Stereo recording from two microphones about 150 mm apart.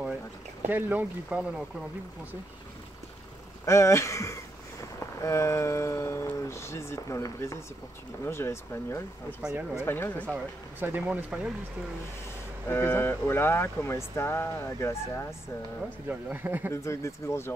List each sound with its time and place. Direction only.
0.7 s speech: 15° right (ahead or behind)
3.6 s speech: 20° left (ahead or behind)
9.4 s speech: 10° right (ahead or behind)
9.8 s speech: 15° left (ahead or behind)
10.2 s speech: 10° right (ahead or behind)
12.6 s speech: 15° left (ahead or behind)
16.1 s speech: 10° right (ahead or behind)
16.7 s speech: 20° left (ahead or behind)